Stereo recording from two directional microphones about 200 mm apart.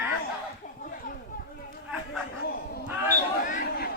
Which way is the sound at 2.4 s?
50° left (ahead or behind).